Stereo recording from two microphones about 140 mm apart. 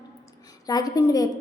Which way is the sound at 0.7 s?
25° left (ahead or behind).